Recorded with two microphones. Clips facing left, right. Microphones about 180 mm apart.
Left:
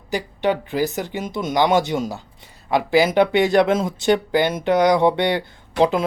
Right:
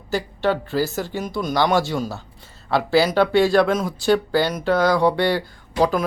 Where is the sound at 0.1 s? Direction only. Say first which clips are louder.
Even; 15° left (ahead or behind).